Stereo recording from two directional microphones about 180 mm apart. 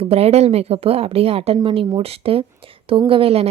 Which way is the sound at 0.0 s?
35° right (ahead or behind).